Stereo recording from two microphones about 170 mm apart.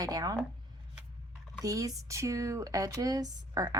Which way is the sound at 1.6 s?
20° right (ahead or behind).